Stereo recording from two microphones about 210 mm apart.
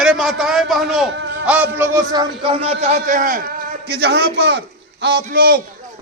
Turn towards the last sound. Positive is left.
turn(degrees=-45)  # may be behind; listen again after turning